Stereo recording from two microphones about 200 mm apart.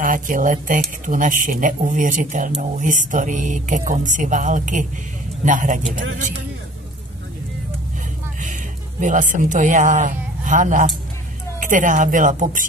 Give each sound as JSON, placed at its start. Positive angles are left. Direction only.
{"t": 0.0, "sound": "speech", "side_deg": -45}
{"t": 9.0, "sound": "speech", "side_deg": -40}